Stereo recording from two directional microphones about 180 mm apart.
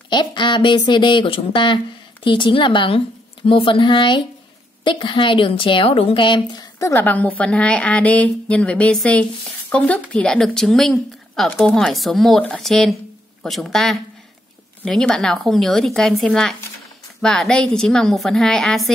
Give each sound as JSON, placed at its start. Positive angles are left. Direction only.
{"t": 0.1, "sound": "a woman's voice", "side_deg": 25}